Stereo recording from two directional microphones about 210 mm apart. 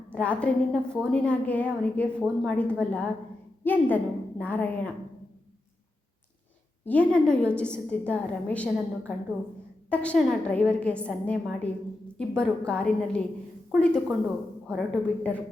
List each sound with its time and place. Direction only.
0.1 s a woman's voice: 5° left (ahead or behind)
6.8 s a woman's voice: 5° left (ahead or behind)